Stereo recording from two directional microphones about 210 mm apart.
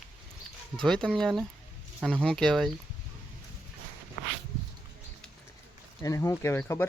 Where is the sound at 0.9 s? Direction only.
5° left (ahead or behind).